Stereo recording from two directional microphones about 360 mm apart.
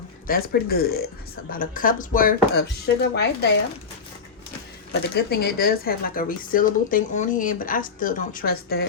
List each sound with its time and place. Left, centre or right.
0.3 s speech: left
4.9 s speech: left